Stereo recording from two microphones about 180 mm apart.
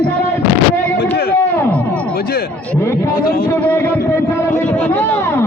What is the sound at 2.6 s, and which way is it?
Speech, 15° left (ahead or behind).